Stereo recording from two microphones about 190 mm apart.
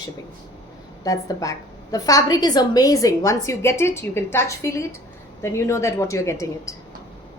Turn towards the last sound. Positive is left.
turn(degrees=15)  # may be behind; listen again after turning